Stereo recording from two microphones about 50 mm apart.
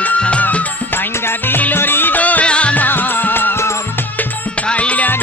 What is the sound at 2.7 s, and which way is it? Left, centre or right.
Music, left.